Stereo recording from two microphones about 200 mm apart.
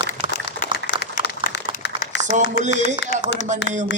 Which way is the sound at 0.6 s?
45° left (ahead or behind).